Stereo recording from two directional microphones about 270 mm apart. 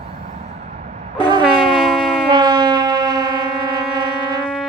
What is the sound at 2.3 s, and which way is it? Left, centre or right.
Wind instrument, centre.